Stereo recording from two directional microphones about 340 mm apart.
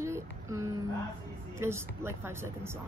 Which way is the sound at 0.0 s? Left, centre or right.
Centre.